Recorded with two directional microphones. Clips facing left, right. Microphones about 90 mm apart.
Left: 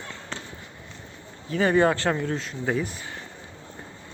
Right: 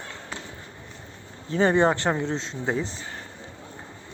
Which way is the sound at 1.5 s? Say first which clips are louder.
Even; 30° right (ahead or behind).